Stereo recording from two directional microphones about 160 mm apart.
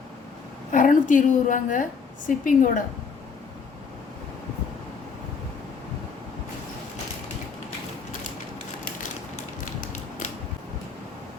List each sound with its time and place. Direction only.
0.7 s a woman's voice: 55° left (ahead or behind)